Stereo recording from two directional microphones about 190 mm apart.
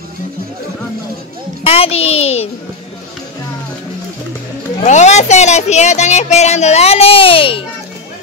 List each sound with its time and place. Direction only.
1.6 s speech: 30° left (ahead or behind)
4.8 s speech: 40° left (ahead or behind)